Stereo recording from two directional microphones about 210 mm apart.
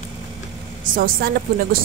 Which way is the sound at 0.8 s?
40° right (ahead or behind).